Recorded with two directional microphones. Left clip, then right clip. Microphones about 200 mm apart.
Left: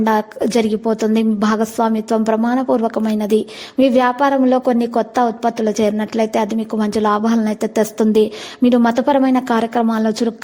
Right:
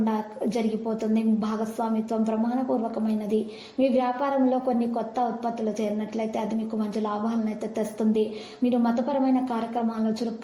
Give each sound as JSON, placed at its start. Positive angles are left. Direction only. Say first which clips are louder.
{"t": 0.5, "sound": "a woman's voice", "louder": "left 12 dB", "side_deg": 40}